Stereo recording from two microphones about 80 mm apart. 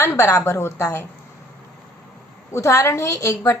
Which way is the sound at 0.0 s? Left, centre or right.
Left.